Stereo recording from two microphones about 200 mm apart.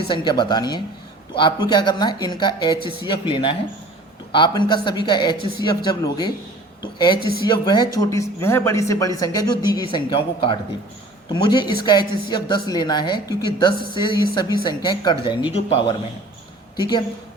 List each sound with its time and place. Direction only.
0.1 s speech: 20° left (ahead or behind)
7.4 s speech: 20° left (ahead or behind)